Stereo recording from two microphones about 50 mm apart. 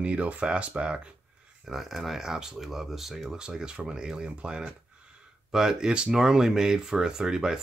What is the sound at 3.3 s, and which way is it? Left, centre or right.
Speech, centre.